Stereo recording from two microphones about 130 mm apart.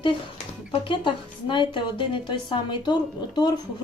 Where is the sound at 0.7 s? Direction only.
40° left (ahead or behind).